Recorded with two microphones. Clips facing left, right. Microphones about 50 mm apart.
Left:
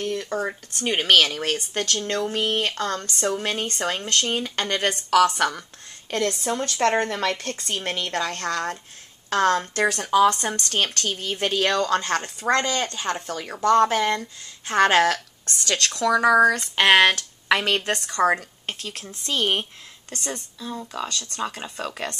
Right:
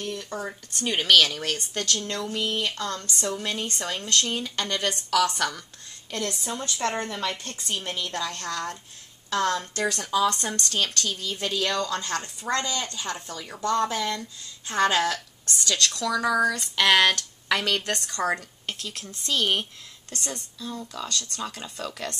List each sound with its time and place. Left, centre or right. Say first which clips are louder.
0.0 s speech: left 6 dB; left
0.7 s speech: left 1 dB; left
6.0 s speech: left 7 dB; left